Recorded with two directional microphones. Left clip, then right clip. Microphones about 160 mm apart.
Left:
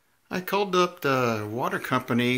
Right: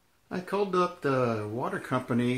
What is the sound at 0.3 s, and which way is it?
Speech, 20° left (ahead or behind).